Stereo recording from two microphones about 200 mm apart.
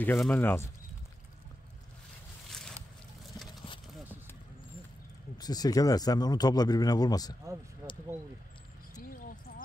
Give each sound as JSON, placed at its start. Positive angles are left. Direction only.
{"t": 0.0, "sound": "speech", "side_deg": 10}
{"t": 3.4, "sound": "a sound", "side_deg": 20}
{"t": 5.4, "sound": "speech", "side_deg": 20}